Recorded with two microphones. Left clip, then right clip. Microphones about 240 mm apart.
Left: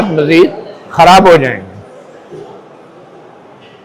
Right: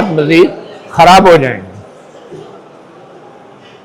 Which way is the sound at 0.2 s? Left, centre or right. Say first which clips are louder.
Even; left.